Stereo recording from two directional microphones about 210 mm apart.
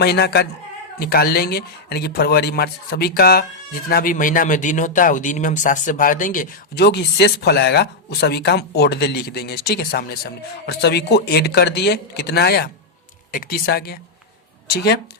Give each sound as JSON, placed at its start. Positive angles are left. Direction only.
{"t": 0.0, "sound": "speech", "side_deg": 50}